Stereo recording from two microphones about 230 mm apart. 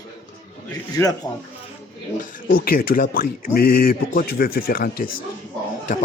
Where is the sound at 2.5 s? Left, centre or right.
Left.